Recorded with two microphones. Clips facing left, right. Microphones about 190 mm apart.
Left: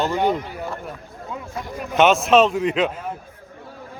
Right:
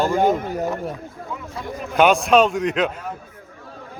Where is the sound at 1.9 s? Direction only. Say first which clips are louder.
Even; centre (ahead or behind).